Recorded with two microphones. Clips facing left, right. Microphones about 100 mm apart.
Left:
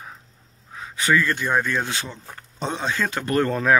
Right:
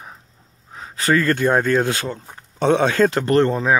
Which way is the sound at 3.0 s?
40° right (ahead or behind).